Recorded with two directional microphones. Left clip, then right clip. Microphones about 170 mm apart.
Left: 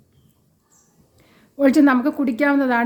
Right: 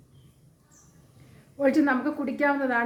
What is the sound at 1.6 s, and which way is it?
A woman's voice, 80° left.